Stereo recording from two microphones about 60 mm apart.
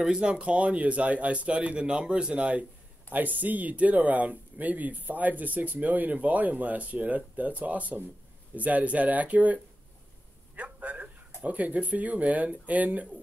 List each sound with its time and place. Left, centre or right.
0.0 s speech: centre